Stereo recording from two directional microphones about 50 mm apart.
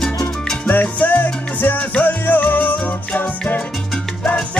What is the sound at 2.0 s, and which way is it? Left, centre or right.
Music, left.